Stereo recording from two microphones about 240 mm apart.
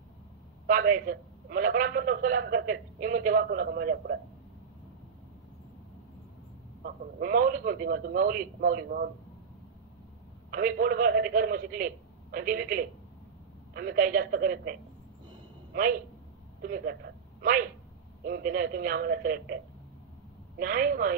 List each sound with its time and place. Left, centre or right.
0.7 s a man's voice: right
6.8 s a man's voice: right
10.5 s a man's voice: right
16.6 s a woman's voice: right